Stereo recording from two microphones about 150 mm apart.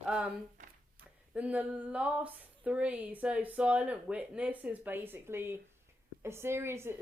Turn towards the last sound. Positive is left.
turn(degrees=-15)  # may be behind; listen again after turning